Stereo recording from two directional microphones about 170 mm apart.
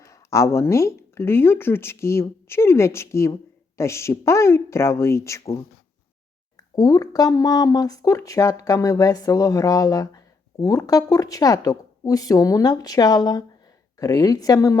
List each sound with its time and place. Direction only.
0.0 s speech: 15° left (ahead or behind)
6.6 s speech: 20° left (ahead or behind)